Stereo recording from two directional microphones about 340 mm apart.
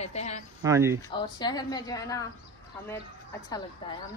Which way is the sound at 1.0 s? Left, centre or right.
Centre.